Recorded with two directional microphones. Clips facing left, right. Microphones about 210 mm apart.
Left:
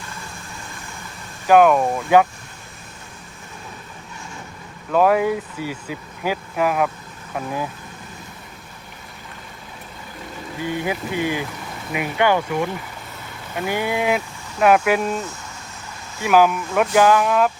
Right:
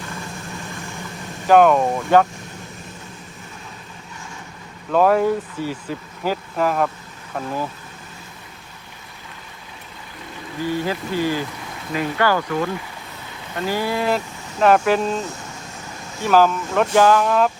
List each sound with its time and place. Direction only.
1.5 s speech: 5° left (ahead or behind)
4.9 s speech: 5° left (ahead or behind)
10.7 s speech: 15° left (ahead or behind)
16.2 s speech: 10° left (ahead or behind)